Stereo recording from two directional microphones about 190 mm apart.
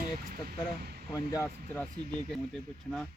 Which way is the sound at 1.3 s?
15° left (ahead or behind).